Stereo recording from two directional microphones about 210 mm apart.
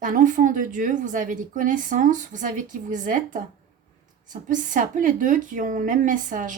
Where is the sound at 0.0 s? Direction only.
40° right (ahead or behind).